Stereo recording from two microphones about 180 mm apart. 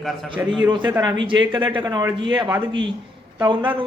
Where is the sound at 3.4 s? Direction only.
25° right (ahead or behind).